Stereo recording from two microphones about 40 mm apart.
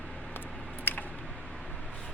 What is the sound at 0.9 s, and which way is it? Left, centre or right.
Chewing, left.